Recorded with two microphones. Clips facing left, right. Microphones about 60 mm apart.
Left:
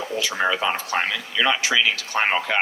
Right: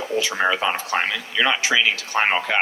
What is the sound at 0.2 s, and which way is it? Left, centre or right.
Speech, right.